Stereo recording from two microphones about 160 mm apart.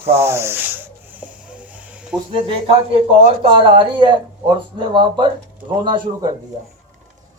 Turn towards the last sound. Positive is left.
turn(degrees=-25)  # may be behind; listen again after turning